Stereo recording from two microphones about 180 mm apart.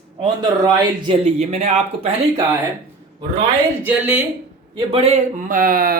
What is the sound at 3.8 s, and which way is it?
Speech, 10° right (ahead or behind).